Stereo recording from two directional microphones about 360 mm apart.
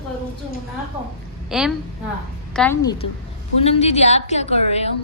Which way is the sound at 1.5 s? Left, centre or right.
Centre.